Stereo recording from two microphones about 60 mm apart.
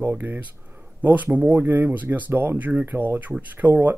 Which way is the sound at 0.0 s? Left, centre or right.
Right.